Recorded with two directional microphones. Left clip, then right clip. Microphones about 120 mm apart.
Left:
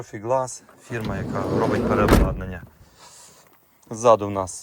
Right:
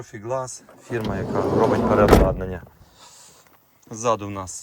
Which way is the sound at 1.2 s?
25° right (ahead or behind).